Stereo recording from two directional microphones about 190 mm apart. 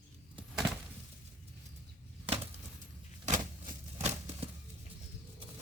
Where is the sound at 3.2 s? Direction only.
40° right (ahead or behind).